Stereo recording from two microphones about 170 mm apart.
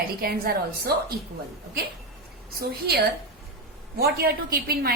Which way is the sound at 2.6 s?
65° right (ahead or behind).